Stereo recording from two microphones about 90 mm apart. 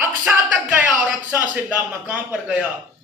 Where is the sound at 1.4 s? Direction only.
15° right (ahead or behind).